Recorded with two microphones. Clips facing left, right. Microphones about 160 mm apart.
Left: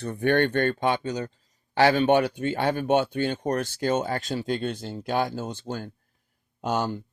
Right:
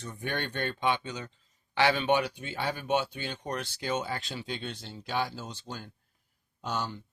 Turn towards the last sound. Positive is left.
turn(degrees=50)  # may be behind; listen again after turning